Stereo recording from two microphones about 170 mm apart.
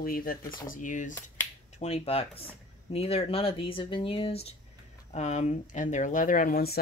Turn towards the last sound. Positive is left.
turn(degrees=55)  # may be behind; listen again after turning